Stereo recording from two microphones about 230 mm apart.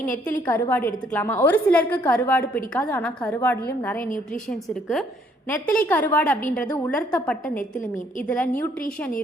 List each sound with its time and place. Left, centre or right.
0.4 s a woman's voice: centre